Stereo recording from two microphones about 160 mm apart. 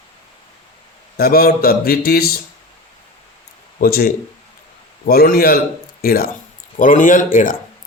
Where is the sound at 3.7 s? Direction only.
65° left (ahead or behind).